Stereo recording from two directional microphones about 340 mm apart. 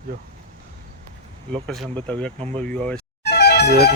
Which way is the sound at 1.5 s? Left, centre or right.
Centre.